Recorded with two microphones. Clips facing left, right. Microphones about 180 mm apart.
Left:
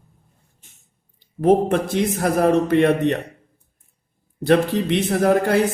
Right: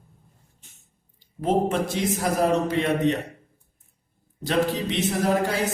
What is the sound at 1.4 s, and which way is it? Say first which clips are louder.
Speech: left 6 dB; 60° left (ahead or behind).